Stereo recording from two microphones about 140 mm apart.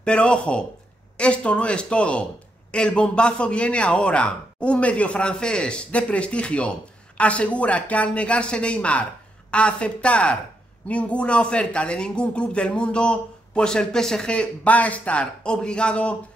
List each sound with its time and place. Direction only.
0.0 s speech: 10° left (ahead or behind)